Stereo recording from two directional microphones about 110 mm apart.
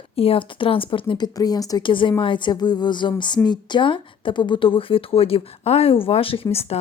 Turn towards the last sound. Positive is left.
turn(degrees=65)  # may be behind; listen again after turning